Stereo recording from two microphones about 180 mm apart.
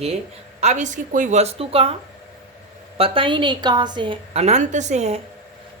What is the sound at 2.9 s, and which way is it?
A woman's voice, 30° right (ahead or behind).